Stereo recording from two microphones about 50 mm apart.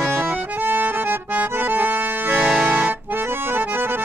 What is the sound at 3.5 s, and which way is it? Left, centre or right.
Accordion, right.